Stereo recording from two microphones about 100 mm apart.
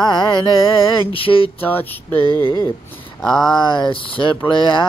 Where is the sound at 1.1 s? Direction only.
65° left (ahead or behind).